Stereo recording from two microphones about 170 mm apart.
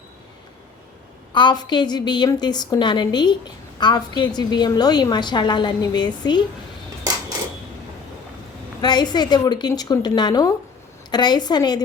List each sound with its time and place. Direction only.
1.3 s a woman's voice: 25° left (ahead or behind)
8.8 s a woman's voice: 25° left (ahead or behind)